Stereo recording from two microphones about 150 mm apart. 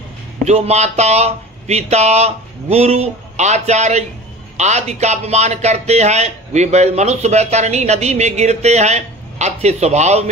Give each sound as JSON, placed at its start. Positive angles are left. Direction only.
{"t": 0.5, "sound": "speech", "side_deg": -45}